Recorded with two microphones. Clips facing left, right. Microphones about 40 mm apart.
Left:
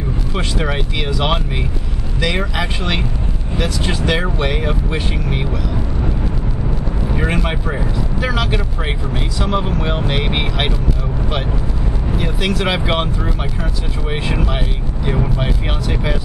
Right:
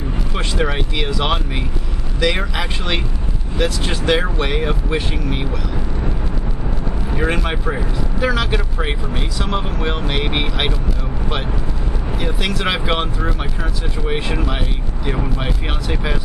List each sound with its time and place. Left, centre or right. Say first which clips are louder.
0.3 s speech: even; centre
7.2 s speech: right 1 dB; centre
12.2 s speech: left 2 dB; centre